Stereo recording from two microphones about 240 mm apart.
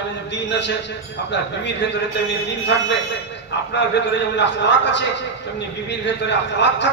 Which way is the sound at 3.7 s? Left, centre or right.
Left.